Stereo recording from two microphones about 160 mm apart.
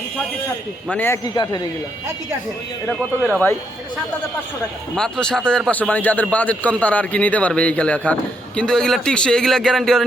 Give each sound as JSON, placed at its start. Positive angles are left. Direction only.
{"t": 0.9, "sound": "a man's voice", "side_deg": 10}
{"t": 2.8, "sound": "speech", "side_deg": 5}
{"t": 4.9, "sound": "a man's voice", "side_deg": 5}